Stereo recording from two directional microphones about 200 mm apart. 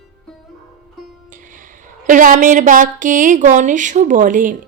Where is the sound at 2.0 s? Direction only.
40° right (ahead or behind).